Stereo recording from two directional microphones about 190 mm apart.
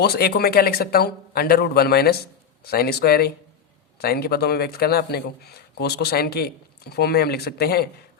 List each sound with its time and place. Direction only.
0.0 s a man's voice: 55° left (ahead or behind)